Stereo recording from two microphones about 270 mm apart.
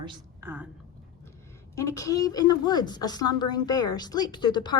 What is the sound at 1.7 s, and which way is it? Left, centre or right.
A woman's voice, centre.